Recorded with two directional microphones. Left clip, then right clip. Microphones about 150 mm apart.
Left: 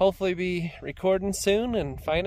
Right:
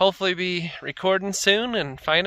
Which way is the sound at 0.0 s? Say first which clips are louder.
Right 3 dB; 10° left (ahead or behind).